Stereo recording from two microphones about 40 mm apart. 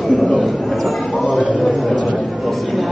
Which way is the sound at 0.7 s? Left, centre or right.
Centre.